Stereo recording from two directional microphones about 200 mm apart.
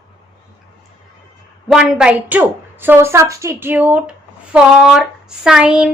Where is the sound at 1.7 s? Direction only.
5° right (ahead or behind).